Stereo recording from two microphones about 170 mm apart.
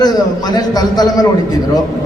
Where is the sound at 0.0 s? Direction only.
25° left (ahead or behind).